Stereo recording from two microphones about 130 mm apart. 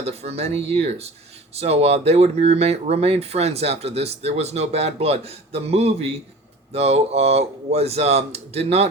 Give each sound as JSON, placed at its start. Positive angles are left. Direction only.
{"t": 0.0, "sound": "speech", "side_deg": -55}